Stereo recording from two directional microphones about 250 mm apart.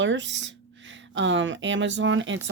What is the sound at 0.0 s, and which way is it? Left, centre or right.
Speech, right.